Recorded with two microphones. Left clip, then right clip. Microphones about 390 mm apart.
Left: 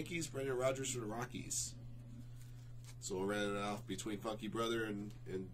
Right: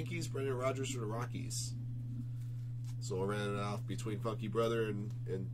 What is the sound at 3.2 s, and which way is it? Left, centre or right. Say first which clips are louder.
Speech: right 1 dB; left.